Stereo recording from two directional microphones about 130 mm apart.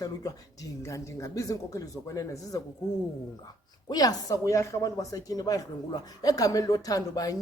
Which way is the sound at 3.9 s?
30° left (ahead or behind).